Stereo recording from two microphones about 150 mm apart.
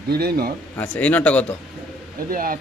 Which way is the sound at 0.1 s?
90° right.